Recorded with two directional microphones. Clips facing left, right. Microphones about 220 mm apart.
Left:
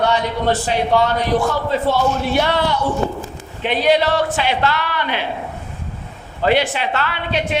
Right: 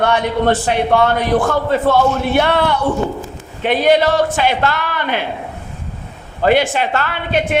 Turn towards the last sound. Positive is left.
turn(degrees=-50)  # may be behind; listen again after turning